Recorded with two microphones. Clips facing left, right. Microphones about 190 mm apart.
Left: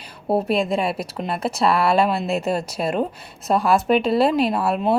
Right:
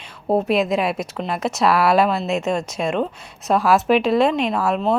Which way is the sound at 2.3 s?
40° left (ahead or behind).